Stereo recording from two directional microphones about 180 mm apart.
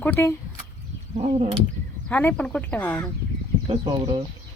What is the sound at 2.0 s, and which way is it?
Speech, 10° left (ahead or behind).